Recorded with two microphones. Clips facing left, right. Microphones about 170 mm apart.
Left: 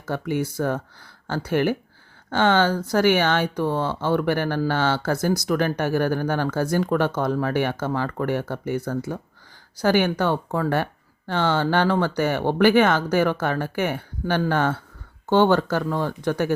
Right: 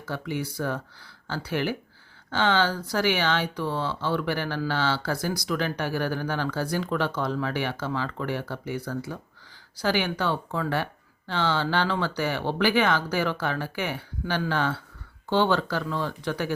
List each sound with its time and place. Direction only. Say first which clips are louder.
0.0 s speech: left 6 dB; 50° left (ahead or behind)